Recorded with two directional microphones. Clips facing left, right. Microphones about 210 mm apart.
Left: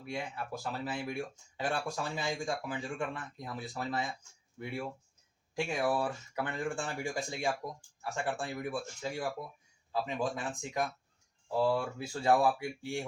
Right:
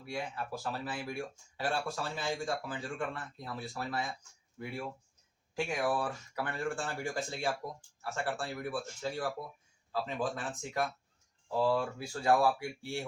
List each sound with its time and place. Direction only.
0.6 s speech: 20° left (ahead or behind)
11.9 s speech: 20° left (ahead or behind)